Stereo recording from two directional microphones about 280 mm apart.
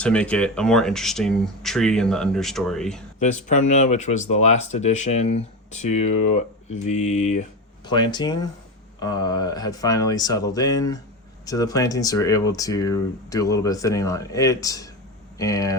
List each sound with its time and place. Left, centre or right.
0.0 s speech: centre
3.2 s speech: left